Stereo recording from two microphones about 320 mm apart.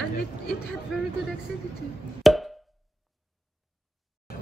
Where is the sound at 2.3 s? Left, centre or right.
Centre.